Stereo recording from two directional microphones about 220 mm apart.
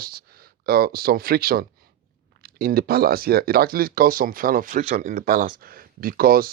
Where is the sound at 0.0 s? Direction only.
40° right (ahead or behind).